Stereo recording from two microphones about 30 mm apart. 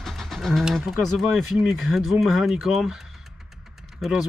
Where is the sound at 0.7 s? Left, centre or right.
Centre.